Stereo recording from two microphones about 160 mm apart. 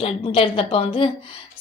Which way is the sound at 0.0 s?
35° left (ahead or behind).